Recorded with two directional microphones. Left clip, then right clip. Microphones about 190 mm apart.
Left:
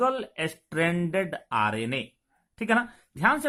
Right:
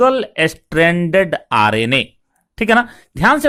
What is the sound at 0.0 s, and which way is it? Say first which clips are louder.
Speech: right 13 dB; 35° right (ahead or behind).